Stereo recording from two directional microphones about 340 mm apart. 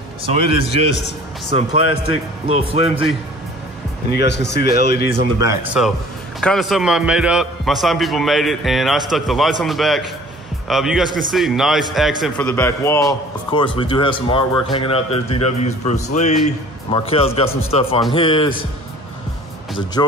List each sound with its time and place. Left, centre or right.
0.2 s speech: centre
2.4 s speech: centre
4.1 s a man's voice: left
5.1 s a man's voice: centre
19.7 s speech: centre